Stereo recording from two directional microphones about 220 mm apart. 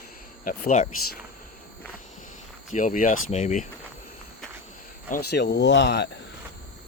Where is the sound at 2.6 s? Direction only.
35° left (ahead or behind).